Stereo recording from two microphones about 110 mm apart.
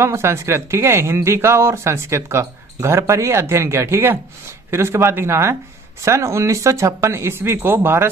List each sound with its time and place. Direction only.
0.0 s speech: 25° right (ahead or behind)